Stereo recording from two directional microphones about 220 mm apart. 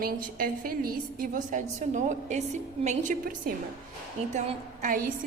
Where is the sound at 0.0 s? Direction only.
40° right (ahead or behind).